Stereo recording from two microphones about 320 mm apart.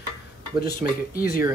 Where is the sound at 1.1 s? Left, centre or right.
Left.